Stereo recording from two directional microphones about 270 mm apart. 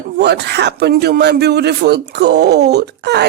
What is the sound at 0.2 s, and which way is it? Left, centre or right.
Speech, right.